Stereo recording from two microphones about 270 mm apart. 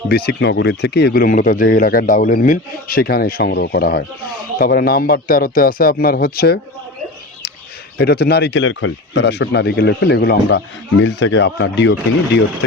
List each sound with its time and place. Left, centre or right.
0.1 s speech: left
7.9 s speech: left